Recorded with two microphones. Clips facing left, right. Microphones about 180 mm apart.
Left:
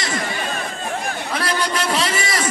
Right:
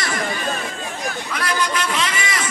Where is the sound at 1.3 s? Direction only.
35° left (ahead or behind).